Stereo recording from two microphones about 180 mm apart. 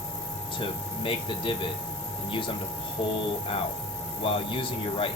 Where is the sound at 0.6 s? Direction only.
30° left (ahead or behind).